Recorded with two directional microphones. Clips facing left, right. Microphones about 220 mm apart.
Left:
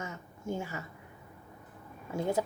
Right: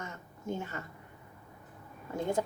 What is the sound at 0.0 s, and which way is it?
Crow, 10° left (ahead or behind).